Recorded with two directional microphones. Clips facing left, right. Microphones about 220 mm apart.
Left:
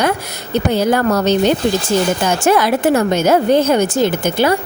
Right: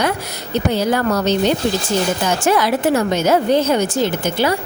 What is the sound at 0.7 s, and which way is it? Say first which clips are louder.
A woman's voice: left 3 dB; 50° left (ahead or behind).